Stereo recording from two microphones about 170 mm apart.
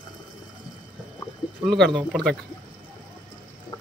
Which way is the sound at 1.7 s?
Centre (ahead or behind).